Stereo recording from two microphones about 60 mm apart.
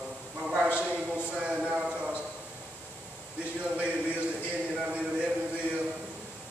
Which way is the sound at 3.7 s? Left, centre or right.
Right.